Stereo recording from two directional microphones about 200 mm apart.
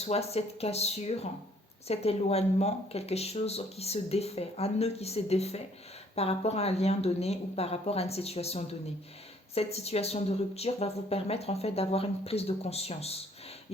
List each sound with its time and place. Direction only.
0.0 s speech: 30° left (ahead or behind)